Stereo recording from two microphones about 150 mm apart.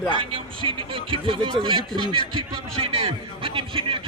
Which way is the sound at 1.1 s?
35° right (ahead or behind).